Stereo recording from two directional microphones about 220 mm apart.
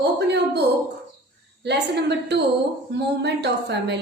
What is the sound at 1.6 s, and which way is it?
A woman's voice, 50° right (ahead or behind).